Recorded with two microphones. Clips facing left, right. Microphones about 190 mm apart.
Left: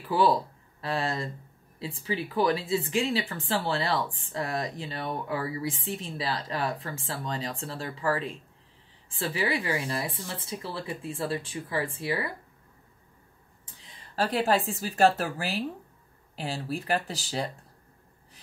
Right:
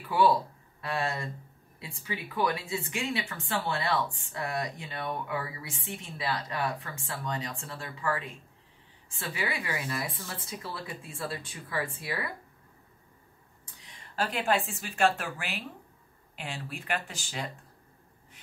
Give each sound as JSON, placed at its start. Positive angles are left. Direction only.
{"t": 0.7, "sound": "speech", "side_deg": 30}
{"t": 9.3, "sound": "speech", "side_deg": 30}
{"t": 14.1, "sound": "speech", "side_deg": 35}